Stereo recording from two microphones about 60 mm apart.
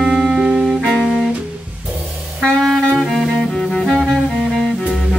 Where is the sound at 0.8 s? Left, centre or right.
Centre.